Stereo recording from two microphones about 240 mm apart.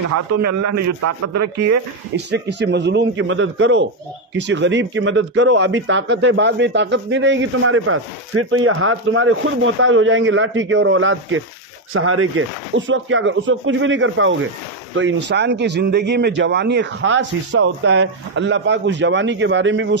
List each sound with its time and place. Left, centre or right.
0.1 s a man's voice: right
2.1 s speech: right